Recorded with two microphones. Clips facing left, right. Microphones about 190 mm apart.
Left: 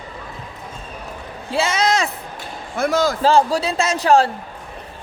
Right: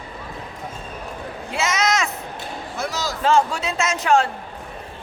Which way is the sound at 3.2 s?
35° left (ahead or behind).